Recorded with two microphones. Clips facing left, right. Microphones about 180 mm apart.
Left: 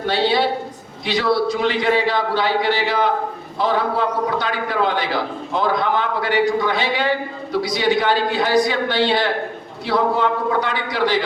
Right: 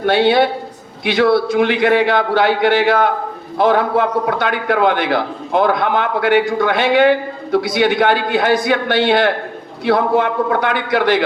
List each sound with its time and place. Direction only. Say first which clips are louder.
0.0 s a man's voice: right 5 dB; 55° right (ahead or behind)